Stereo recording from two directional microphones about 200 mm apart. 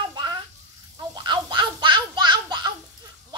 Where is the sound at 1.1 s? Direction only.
20° right (ahead or behind).